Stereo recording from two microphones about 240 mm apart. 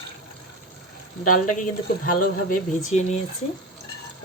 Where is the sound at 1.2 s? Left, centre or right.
Left.